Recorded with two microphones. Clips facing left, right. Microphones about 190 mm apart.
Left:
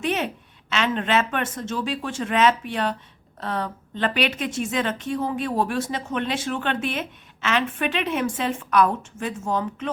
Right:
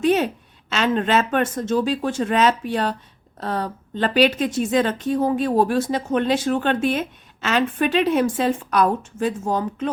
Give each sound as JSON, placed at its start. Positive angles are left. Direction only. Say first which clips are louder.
{"t": 0.0, "sound": "speech", "louder": "right 7 dB", "side_deg": -40}